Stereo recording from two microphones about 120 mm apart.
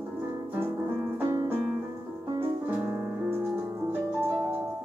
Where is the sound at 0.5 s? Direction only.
15° right (ahead or behind).